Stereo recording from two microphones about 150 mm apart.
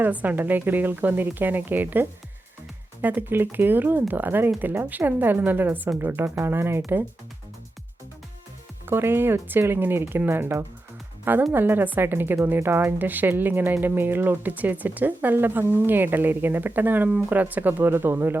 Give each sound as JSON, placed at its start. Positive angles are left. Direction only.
{"t": 0.0, "sound": "speech", "side_deg": -10}
{"t": 8.9, "sound": "speech", "side_deg": -15}